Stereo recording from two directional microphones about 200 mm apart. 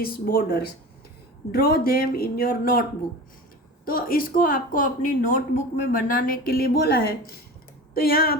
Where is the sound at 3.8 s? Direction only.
45° left (ahead or behind).